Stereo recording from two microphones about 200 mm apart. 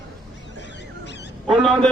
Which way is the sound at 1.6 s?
5° left (ahead or behind).